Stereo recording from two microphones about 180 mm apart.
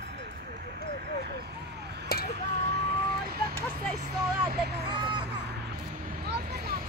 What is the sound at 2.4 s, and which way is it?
Vehicle, 65° right (ahead or behind).